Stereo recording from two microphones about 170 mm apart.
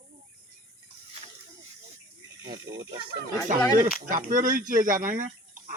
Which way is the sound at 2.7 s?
60° right (ahead or behind).